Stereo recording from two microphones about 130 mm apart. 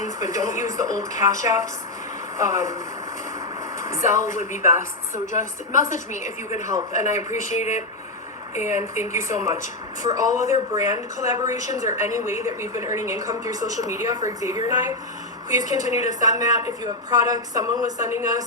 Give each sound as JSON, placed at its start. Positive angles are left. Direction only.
{"t": 0.2, "sound": "speech", "side_deg": -25}
{"t": 3.8, "sound": "speech", "side_deg": -25}
{"t": 7.2, "sound": "speech", "side_deg": 65}
{"t": 8.6, "sound": "speech", "side_deg": -20}